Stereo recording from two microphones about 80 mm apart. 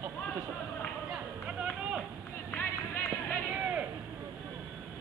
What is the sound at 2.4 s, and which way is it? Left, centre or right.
Music, left.